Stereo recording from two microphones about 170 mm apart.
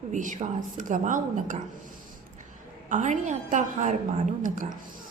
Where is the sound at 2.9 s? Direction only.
45° right (ahead or behind).